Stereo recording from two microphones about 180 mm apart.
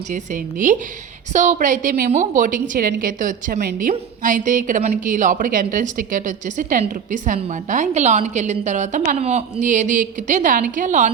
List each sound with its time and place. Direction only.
0.1 s a woman's voice: 45° right (ahead or behind)